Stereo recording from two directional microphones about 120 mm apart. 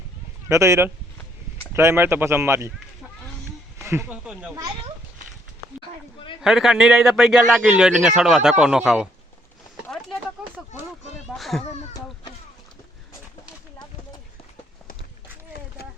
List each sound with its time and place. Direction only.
0.4 s speech: 25° right (ahead or behind)
3.8 s a sound: 20° right (ahead or behind)
4.1 s speech: 10° right (ahead or behind)
6.4 s a man's voice: 5° right (ahead or behind)
10.4 s a sound: centre (ahead or behind)
11.3 s a child's voice: centre (ahead or behind)